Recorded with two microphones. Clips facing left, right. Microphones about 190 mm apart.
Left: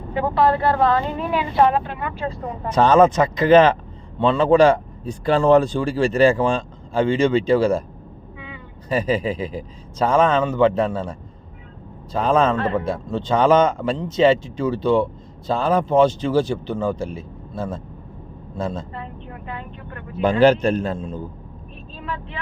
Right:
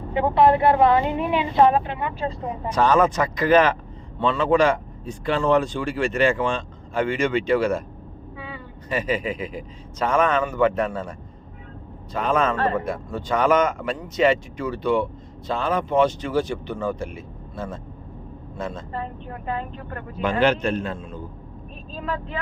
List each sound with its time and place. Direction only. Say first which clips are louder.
0.1 s a woman's voice: right 1 dB; 20° right (ahead or behind)
2.7 s a man's voice: left 5 dB; 25° left (ahead or behind)
8.4 s a sound: right 2 dB; 40° right (ahead or behind)
8.9 s a man's voice: left 4 dB; 35° left (ahead or behind)
12.1 s a man's voice: left 4 dB; 30° left (ahead or behind)
18.9 s speech: right 3 dB; 40° right (ahead or behind)
20.4 s speech: left 6 dB; 35° left (ahead or behind)
21.9 s speech: right 3 dB; 40° right (ahead or behind)